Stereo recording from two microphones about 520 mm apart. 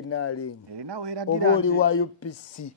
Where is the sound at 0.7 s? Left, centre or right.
Right.